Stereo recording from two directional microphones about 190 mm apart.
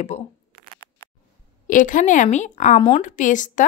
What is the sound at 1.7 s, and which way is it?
Speech, 45° left (ahead or behind).